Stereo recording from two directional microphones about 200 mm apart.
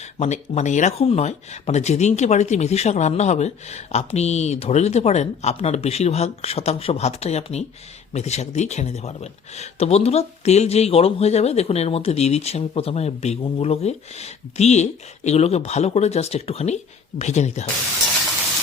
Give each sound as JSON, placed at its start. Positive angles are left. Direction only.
{"t": 0.2, "sound": "speech", "side_deg": 35}